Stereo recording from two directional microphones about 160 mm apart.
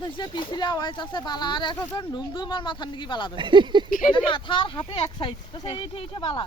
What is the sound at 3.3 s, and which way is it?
Speech, 30° right (ahead or behind).